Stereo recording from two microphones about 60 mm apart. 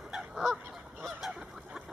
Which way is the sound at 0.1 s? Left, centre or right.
Centre.